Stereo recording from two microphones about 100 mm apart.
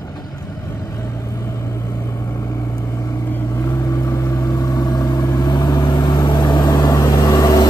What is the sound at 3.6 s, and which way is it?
Vehicle, 35° left (ahead or behind).